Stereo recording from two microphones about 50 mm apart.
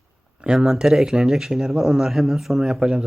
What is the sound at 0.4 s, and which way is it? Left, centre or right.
Speech, centre.